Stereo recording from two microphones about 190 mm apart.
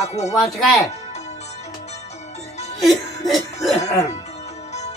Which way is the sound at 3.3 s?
Centre (ahead or behind).